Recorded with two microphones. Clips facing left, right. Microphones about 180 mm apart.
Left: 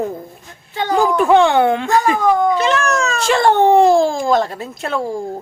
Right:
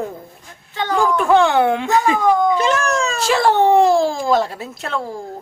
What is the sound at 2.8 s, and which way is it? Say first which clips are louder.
Speech: left 1 dB; 30° right (ahead or behind).